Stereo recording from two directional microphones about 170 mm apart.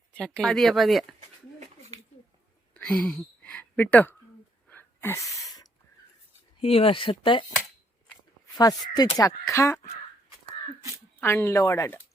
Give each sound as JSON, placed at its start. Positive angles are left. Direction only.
{"t": 0.1, "sound": "speech", "side_deg": 5}
{"t": 1.5, "sound": "a sound", "side_deg": -45}
{"t": 2.7, "sound": "speech", "side_deg": 5}
{"t": 4.7, "sound": "a sound", "side_deg": 10}
{"t": 6.6, "sound": "speech", "side_deg": 35}
{"t": 8.5, "sound": "speech", "side_deg": 25}
{"t": 11.2, "sound": "speech", "side_deg": 15}